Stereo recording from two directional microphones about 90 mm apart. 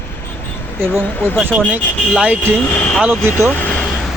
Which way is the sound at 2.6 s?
20° left (ahead or behind).